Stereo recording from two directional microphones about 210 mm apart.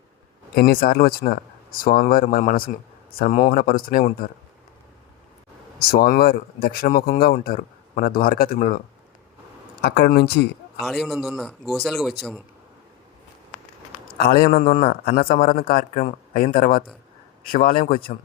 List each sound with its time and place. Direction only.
0.5 s speech: 45° left (ahead or behind)
5.9 s speech: 45° left (ahead or behind)
9.8 s speech: 50° left (ahead or behind)
10.8 s a man's voice: centre (ahead or behind)
14.2 s speech: 45° left (ahead or behind)